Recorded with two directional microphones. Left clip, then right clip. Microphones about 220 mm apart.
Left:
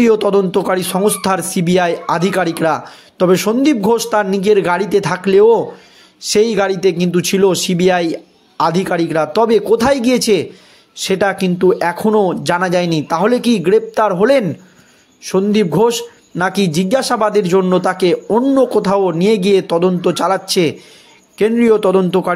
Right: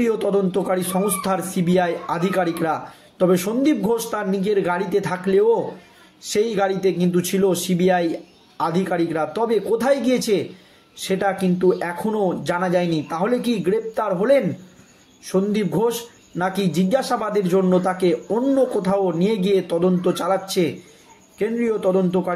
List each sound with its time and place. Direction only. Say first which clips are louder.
0.0 s a man's voice: left 8 dB; 40° left (ahead or behind)